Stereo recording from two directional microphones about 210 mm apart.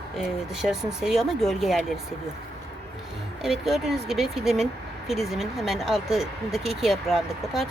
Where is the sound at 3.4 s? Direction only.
Centre (ahead or behind).